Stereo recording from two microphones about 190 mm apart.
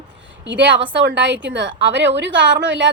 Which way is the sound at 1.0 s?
70° right (ahead or behind).